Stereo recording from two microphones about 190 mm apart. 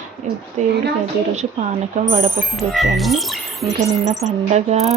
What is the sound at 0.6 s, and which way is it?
Speech, 35° right (ahead or behind).